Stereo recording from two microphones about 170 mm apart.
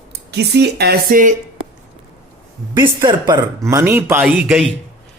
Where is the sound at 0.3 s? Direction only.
80° right.